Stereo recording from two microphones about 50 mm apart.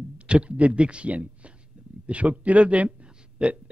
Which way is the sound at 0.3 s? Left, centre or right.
Right.